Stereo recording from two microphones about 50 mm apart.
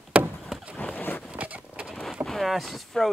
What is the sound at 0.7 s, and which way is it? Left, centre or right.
Boat, left.